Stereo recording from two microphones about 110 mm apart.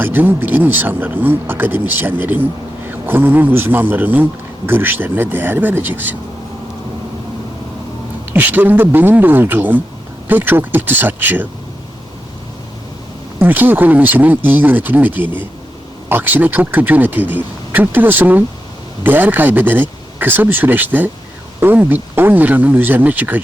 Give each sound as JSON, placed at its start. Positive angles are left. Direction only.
{"t": 0.0, "sound": "a man's voice", "side_deg": -20}
{"t": 8.3, "sound": "a man's voice", "side_deg": -15}
{"t": 13.4, "sound": "a man's voice", "side_deg": -15}